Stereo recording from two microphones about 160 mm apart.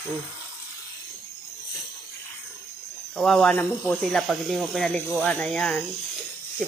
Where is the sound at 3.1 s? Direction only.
5° left (ahead or behind).